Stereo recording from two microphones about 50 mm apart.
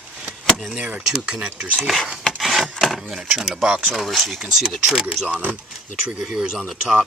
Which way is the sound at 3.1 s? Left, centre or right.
Centre.